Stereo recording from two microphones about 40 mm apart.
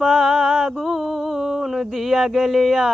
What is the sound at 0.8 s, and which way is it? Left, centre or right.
Mantra, centre.